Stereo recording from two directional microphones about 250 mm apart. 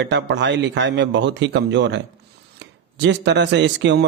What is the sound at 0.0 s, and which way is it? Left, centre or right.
Speech, right.